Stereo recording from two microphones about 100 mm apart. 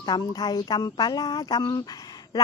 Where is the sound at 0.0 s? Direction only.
40° left (ahead or behind).